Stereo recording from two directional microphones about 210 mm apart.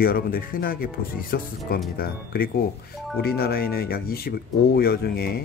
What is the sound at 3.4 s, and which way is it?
Speech, 45° left (ahead or behind).